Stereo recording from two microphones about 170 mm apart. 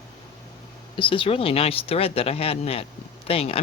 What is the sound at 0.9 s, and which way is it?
Speech, 30° left (ahead or behind).